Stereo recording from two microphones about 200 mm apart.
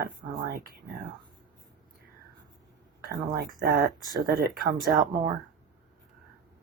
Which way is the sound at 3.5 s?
45° right (ahead or behind).